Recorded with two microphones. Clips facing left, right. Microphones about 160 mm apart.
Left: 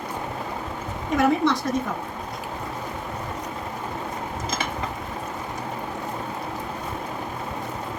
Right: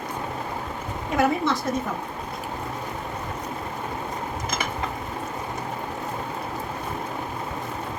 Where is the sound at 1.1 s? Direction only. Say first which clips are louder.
Left 2 dB; centre (ahead or behind).